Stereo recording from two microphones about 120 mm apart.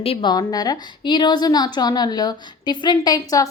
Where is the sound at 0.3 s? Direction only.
35° left (ahead or behind).